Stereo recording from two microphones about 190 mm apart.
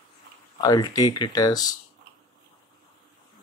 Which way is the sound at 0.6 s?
20° left (ahead or behind).